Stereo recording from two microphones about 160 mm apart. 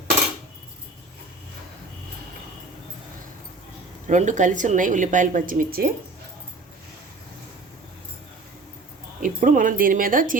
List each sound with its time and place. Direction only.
4.0 s a woman's voice: 50° right (ahead or behind)
9.2 s speech: 55° right (ahead or behind)